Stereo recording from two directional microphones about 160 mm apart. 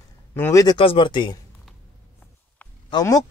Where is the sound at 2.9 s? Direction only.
25° left (ahead or behind).